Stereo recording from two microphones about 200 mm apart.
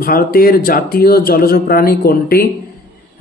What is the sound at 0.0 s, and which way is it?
Speech, 45° left (ahead or behind).